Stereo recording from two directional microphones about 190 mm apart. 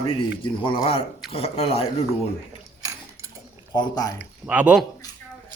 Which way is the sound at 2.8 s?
20° right (ahead or behind).